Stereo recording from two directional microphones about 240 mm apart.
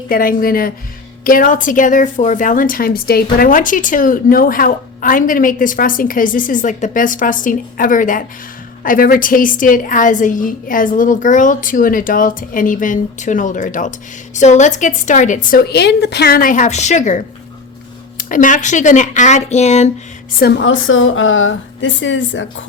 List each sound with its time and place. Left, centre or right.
0.1 s a woman's voice: left
18.2 s a woman's voice: left
20.4 s a woman's voice: left